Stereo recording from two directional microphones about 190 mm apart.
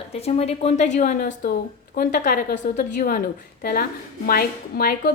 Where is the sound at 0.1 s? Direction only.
30° left (ahead or behind).